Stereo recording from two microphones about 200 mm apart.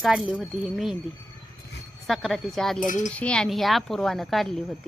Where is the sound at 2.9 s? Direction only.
40° left (ahead or behind).